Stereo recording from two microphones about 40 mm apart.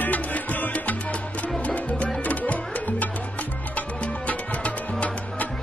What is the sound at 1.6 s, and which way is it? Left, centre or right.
Music, left.